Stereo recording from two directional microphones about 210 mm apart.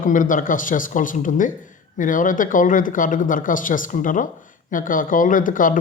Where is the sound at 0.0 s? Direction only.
40° left (ahead or behind).